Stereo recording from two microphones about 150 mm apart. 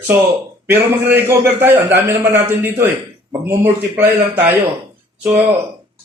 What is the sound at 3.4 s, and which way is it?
A man's voice, 15° right (ahead or behind).